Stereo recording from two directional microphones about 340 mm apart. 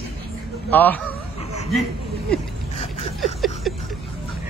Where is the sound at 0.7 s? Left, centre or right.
Centre.